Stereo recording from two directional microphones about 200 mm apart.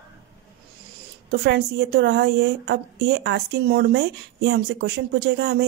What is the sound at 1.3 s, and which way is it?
A woman's voice, 60° right (ahead or behind).